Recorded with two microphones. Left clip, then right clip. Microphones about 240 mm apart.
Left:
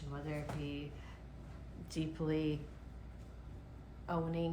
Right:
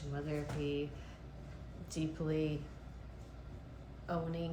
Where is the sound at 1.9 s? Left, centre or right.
Left.